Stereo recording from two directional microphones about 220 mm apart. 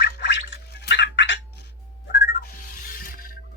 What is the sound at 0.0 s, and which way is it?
Gargling, 50° left (ahead or behind).